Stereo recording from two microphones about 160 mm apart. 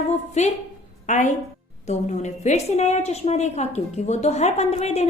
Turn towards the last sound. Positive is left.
turn(degrees=40)  # may be behind; listen again after turning